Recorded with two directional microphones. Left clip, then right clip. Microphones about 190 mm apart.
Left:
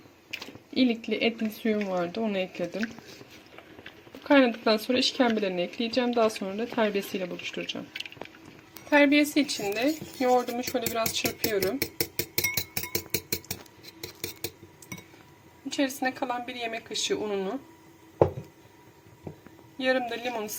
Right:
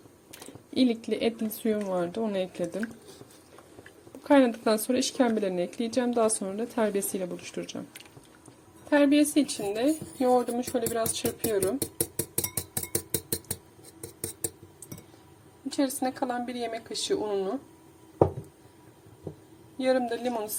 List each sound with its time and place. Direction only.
0.7 s speech: 15° right (ahead or behind)
4.2 s speech: 15° right (ahead or behind)
8.9 s speech: 10° right (ahead or behind)
15.7 s speech: 10° right (ahead or behind)
19.8 s speech: 10° right (ahead or behind)